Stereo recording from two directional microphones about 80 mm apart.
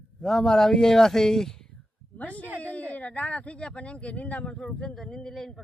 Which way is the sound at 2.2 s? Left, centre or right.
Centre.